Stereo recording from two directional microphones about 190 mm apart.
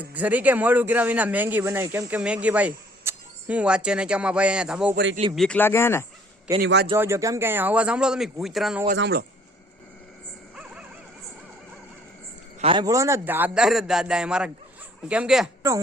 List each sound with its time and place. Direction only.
0.0 s speech: 10° right (ahead or behind); by 6.1 s 15° left (ahead or behind)
6.6 s a man's voice: 65° right (ahead or behind)
6.9 s speech: 15° right (ahead or behind)
9.0 s a man's voice: 55° right (ahead or behind)
10.5 s dog: 5° right (ahead or behind)
12.5 s a man's voice: 25° right (ahead or behind); by 15.4 s 5° right (ahead or behind)